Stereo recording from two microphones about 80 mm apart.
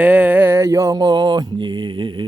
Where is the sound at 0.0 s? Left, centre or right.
Centre.